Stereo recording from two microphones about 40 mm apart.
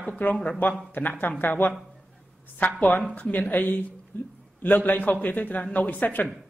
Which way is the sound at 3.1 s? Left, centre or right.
Left.